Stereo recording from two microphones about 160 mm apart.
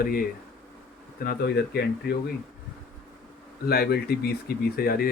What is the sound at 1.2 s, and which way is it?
Speech, 85° left.